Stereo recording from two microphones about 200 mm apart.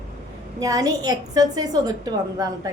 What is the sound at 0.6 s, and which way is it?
A woman's voice, 20° right (ahead or behind).